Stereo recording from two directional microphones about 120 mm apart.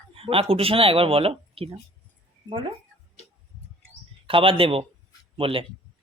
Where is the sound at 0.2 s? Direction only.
50° right (ahead or behind).